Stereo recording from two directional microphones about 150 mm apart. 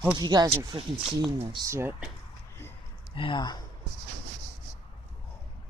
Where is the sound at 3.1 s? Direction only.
35° left (ahead or behind).